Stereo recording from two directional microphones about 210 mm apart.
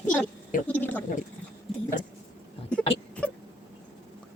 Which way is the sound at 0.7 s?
10° left (ahead or behind).